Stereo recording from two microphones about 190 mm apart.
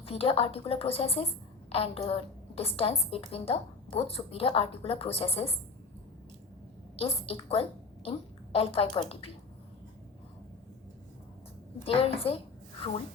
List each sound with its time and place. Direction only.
0.0 s a woman's voice: 30° left (ahead or behind)
6.9 s a woman's voice: 30° left (ahead or behind)
11.9 s a woman's voice: 30° left (ahead or behind)